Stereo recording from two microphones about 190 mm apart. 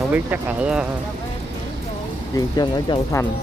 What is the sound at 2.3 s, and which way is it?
Speech, 20° left (ahead or behind).